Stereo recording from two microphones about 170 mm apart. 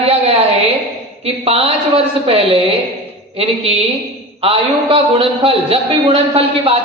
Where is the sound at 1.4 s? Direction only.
35° right (ahead or behind).